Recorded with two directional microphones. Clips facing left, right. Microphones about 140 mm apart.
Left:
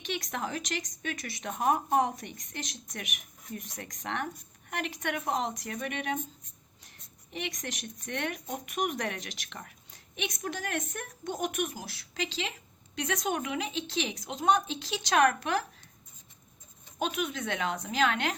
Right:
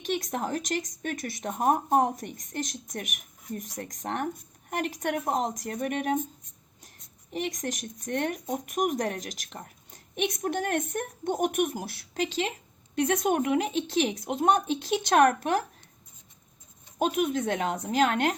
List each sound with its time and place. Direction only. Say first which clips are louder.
0.0 s speech: right 5 dB; 45° right (ahead or behind)
7.3 s speech: right 6 dB; 45° right (ahead or behind)
10.2 s speech: right 7 dB; 55° right (ahead or behind)
17.0 s speech: right 6 dB; 50° right (ahead or behind)